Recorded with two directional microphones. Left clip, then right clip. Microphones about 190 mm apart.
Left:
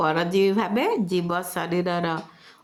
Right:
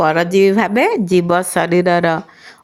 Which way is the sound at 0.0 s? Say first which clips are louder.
Right 9 dB; 30° right (ahead or behind).